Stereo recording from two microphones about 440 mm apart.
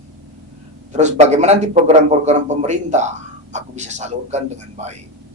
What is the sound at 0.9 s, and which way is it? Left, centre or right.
A man's voice, centre.